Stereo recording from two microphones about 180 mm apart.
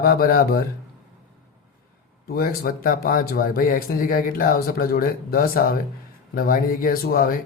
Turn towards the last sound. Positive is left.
turn(degrees=55)  # may be behind; listen again after turning